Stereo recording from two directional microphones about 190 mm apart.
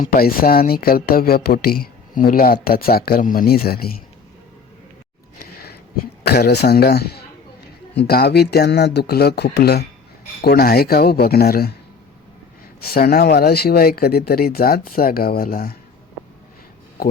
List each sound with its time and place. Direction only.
0.0 s speech: 50° left (ahead or behind)
5.4 s a sound: 55° left (ahead or behind)
6.2 s speech: 55° left (ahead or behind)
12.8 s speech: 55° left (ahead or behind)